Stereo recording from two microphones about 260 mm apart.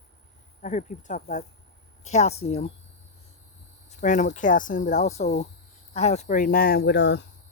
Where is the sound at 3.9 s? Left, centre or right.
Left.